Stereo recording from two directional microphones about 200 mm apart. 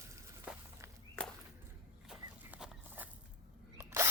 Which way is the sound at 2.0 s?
5° right (ahead or behind).